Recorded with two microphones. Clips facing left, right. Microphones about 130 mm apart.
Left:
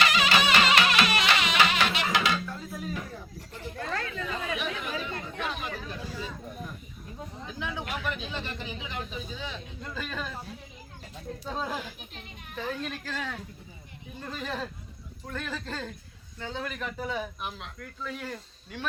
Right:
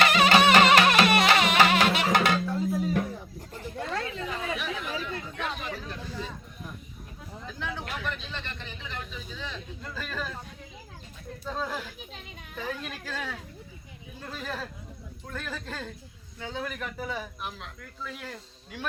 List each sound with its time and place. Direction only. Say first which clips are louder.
0.0 s music: right 5 dB; 50° right (ahead or behind)
2.5 s a sound: right 10 dB; 20° right (ahead or behind)
3.8 s chatter: right 1 dB; 25° right (ahead or behind)
4.5 s chatter: even; centre (ahead or behind)
7.4 s a sound: even; centre (ahead or behind)
9.4 s speech: even; 5° left (ahead or behind)
11.4 s speech: right 1 dB; 5° left (ahead or behind)
12.8 s speech: left 1 dB; 5° right (ahead or behind)